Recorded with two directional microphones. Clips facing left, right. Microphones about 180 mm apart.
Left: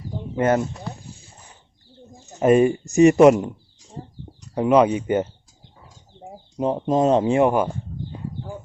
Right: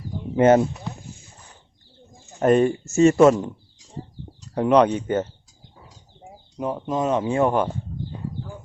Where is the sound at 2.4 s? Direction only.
5° left (ahead or behind).